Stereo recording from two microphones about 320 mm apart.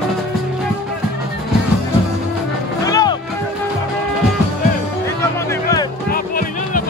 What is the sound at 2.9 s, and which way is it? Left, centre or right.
Music, centre.